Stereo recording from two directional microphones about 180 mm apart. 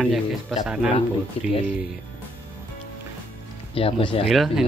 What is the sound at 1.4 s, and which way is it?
Speech, 30° left (ahead or behind).